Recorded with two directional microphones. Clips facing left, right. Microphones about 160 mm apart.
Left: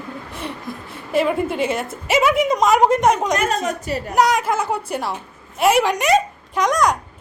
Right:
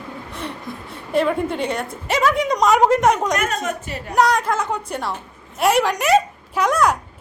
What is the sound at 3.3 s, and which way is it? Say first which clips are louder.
Speech: left 2 dB; 35° left (ahead or behind).